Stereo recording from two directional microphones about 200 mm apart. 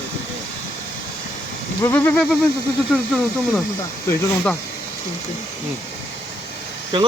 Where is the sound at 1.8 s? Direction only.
10° left (ahead or behind).